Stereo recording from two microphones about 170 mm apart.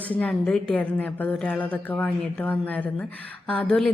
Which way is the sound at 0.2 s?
5° left (ahead or behind).